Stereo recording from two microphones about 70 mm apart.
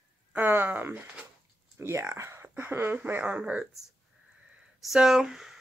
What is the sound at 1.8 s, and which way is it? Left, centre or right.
Speech, right.